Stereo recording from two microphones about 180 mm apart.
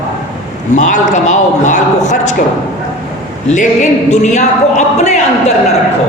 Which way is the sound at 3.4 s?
40° left (ahead or behind).